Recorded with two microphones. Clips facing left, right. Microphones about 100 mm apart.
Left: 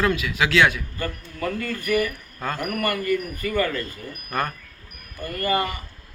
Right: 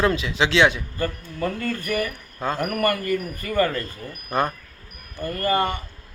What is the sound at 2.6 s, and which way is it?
Speech, 45° right (ahead or behind).